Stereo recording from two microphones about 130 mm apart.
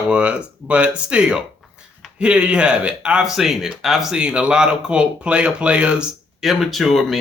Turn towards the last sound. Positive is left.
turn(degrees=0)  # may be behind; listen again after turning